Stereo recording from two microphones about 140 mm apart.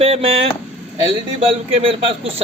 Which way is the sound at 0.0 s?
45° right (ahead or behind).